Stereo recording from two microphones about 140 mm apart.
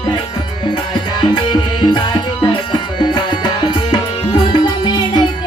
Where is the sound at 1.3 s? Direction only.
30° left (ahead or behind).